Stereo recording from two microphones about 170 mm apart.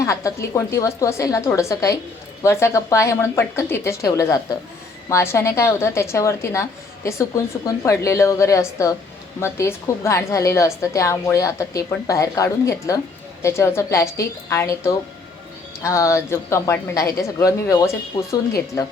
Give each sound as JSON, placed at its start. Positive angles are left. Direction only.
{"t": 0.0, "sound": "a woman's voice", "side_deg": 15}